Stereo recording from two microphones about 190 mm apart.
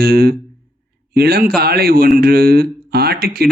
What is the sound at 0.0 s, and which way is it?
Speech, 55° right (ahead or behind).